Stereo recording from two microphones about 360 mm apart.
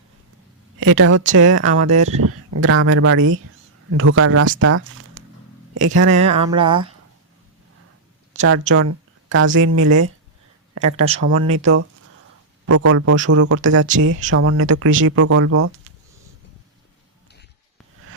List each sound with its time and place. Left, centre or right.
0.8 s speech: right
1.8 s speech: centre
2.1 s speech: right
6.1 s a sound: centre
8.4 s speech: right
10.8 s a sound: centre
11.2 s speech: right